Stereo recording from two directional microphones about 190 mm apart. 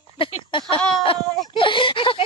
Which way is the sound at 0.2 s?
25° left (ahead or behind).